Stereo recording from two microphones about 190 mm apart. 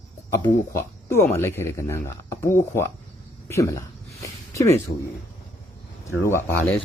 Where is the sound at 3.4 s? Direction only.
15° left (ahead or behind).